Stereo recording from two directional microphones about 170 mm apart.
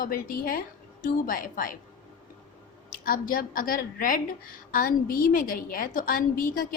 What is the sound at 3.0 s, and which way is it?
A woman's voice, 55° left (ahead or behind).